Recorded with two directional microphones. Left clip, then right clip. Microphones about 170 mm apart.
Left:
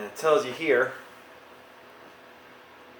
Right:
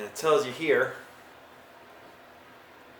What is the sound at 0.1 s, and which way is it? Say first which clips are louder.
Speech: left 1 dB; 10° left (ahead or behind).